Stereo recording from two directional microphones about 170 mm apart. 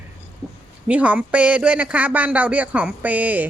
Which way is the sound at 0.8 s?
10° right (ahead or behind).